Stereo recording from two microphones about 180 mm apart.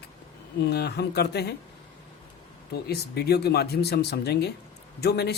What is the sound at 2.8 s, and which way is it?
Speech, 65° left (ahead or behind).